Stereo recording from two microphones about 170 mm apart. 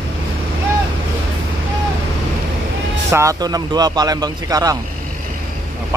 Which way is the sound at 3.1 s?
20° right (ahead or behind).